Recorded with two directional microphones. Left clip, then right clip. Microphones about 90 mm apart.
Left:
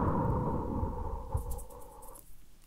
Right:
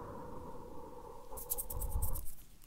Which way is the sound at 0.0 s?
30° left (ahead or behind).